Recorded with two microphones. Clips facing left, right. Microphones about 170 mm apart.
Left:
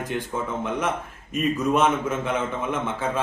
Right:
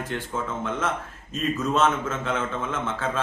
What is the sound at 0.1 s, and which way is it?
A man's voice, 15° left (ahead or behind).